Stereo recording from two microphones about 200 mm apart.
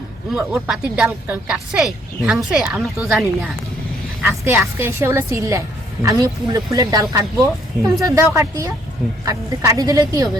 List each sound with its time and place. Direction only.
0.3 s a woman's voice: 5° right (ahead or behind)